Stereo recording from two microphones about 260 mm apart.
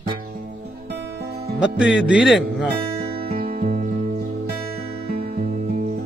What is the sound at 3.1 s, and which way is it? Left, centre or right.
Music, right.